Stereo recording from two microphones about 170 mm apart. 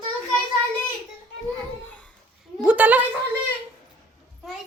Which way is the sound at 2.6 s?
10° right (ahead or behind).